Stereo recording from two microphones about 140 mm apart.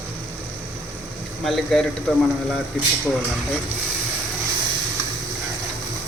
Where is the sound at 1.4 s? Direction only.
Centre (ahead or behind).